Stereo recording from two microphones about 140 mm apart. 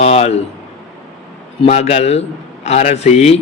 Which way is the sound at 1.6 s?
50° left (ahead or behind).